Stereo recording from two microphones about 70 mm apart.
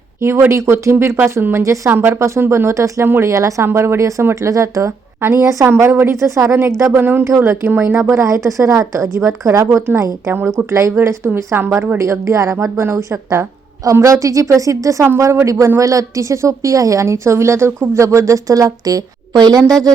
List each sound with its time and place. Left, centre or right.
0.2 s speech: right
1.2 s speech: right
1.6 s a woman's voice: right
1.9 s a woman's voice: right
5.6 s speech: right
6.1 s a woman's voice: right
6.9 s speech: right
7.3 s a woman's voice: right
7.6 s a woman's voice: right
10.3 s speech: right
11.5 s speech: right
11.9 s a woman's voice: right